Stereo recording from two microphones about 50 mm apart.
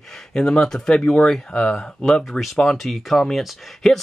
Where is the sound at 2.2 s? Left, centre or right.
Centre.